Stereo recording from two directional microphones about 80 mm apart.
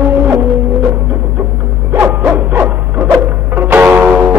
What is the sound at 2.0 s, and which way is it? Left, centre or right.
Bow-wow, right.